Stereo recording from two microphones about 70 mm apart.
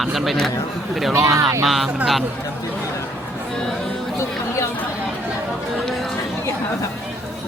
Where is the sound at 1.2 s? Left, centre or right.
Right.